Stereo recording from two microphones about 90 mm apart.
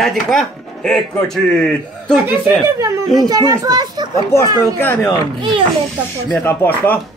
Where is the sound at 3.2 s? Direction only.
45° right (ahead or behind).